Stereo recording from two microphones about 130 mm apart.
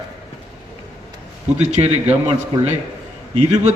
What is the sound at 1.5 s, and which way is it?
Speech, 65° right (ahead or behind).